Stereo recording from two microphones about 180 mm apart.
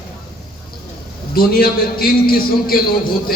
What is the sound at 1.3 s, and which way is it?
Speech, 55° left (ahead or behind).